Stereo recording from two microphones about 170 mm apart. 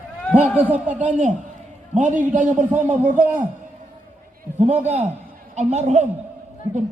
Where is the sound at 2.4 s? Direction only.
10° right (ahead or behind).